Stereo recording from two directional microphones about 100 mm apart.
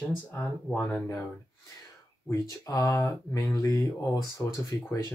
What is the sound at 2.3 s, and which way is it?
Speech, 35° left (ahead or behind).